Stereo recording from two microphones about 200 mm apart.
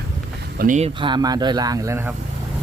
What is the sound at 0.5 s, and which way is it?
Speech, 45° right (ahead or behind).